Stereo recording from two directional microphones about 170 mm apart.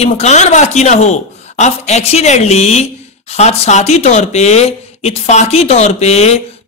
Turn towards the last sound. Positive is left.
turn(degrees=40)  # may be behind; listen again after turning